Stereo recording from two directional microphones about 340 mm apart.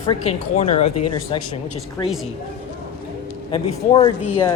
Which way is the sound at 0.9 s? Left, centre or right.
Left.